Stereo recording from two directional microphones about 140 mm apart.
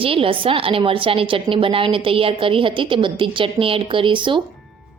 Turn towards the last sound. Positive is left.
turn(degrees=-35)  # may be behind; listen again after turning